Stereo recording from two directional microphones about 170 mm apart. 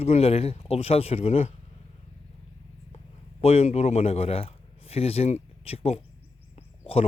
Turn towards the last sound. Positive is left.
turn(degrees=35)  # may be behind; listen again after turning